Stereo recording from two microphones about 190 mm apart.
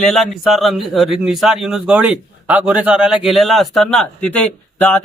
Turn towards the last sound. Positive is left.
turn(degrees=10)  # may be behind; listen again after turning